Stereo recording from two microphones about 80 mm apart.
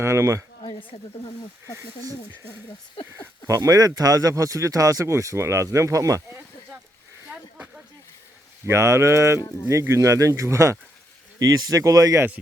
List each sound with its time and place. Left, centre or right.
0.0 s speech: right
3.4 s speech: right
8.6 s speech: right